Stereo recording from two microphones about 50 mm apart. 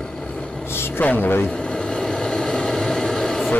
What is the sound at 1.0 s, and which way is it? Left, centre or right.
Speech, left.